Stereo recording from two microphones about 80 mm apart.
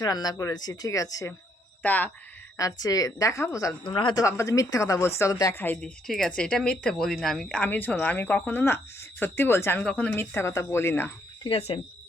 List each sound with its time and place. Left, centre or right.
0.0 s a woman's voice: left
1.8 s speech: left
2.6 s a woman's voice: left
3.8 s speech: left
4.1 s speech: left
5.3 s a woman's voice: left
5.5 s speech: left
5.8 s speech: centre; by 9.8 s left
9.8 s speech: centre
10.1 s speech: left